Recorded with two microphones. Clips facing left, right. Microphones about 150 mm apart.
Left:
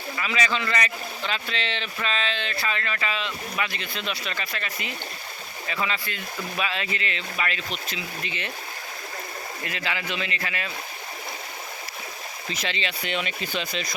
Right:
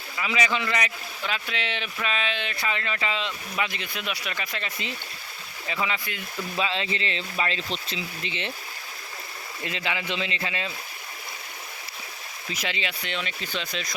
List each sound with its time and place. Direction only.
0.2 s speech: 15° right (ahead or behind)
9.6 s speech: 20° right (ahead or behind)
12.5 s speech: 10° right (ahead or behind)
13.1 s speech: 10° left (ahead or behind)